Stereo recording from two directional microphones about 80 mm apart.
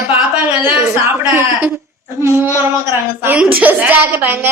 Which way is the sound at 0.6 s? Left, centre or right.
Right.